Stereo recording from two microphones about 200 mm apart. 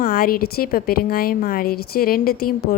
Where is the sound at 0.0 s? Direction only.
50° left (ahead or behind).